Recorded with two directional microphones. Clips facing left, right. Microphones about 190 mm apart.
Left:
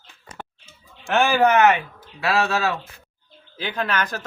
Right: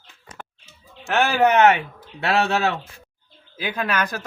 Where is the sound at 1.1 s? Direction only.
15° right (ahead or behind).